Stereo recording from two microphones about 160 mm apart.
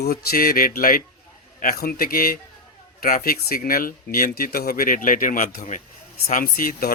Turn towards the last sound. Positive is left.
turn(degrees=60)  # may be behind; listen again after turning